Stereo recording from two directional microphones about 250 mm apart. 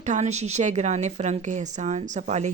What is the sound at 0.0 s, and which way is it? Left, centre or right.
Speech, right.